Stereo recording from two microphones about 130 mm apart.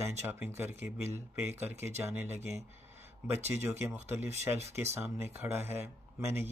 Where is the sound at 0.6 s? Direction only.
15° right (ahead or behind).